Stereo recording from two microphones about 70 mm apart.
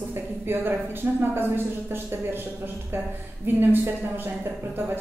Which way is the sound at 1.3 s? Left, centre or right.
Right.